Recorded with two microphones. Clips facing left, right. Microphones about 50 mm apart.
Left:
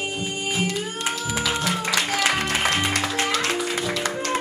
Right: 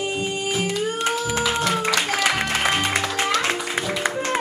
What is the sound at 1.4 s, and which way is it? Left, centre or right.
Music, centre.